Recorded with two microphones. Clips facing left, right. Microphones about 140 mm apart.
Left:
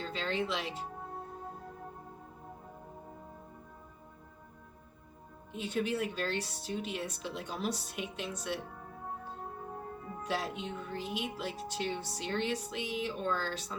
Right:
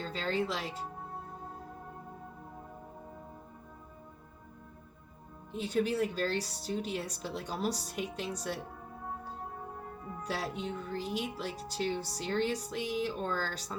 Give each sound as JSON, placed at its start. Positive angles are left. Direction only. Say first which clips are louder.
{"t": 0.0, "sound": "music", "louder": "right 1 dB", "side_deg": -35}
{"t": 5.5, "sound": "speech", "louder": "right 3 dB", "side_deg": -40}
{"t": 10.2, "sound": "speech", "louder": "even", "side_deg": -40}